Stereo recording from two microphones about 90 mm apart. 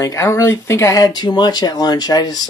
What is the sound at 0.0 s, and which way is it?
Speech, 35° left (ahead or behind).